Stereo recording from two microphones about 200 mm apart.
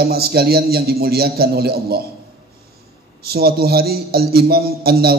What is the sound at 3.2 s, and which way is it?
Speech, 50° right (ahead or behind).